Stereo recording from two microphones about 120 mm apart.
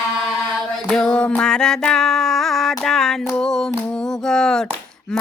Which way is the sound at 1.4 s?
5° left (ahead or behind).